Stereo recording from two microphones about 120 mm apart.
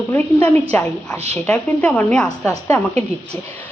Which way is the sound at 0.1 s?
20° left (ahead or behind).